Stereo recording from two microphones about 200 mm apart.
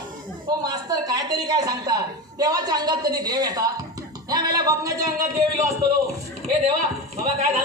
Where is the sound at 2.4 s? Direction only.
20° right (ahead or behind).